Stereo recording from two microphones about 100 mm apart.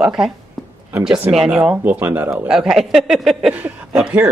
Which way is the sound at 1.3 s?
5° right (ahead or behind).